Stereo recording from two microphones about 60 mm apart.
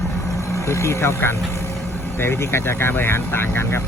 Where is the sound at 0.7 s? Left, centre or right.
Left.